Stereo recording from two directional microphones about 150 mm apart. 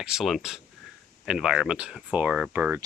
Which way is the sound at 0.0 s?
5° right (ahead or behind).